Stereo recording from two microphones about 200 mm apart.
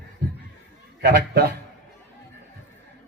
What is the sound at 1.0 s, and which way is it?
Speech, 50° right (ahead or behind).